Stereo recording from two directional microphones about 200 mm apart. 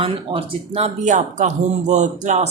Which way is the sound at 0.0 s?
30° right (ahead or behind).